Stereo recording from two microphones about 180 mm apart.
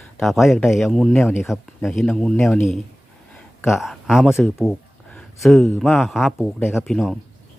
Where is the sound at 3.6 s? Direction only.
Centre (ahead or behind).